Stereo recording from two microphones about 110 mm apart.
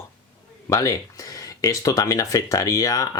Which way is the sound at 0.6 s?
30° left (ahead or behind).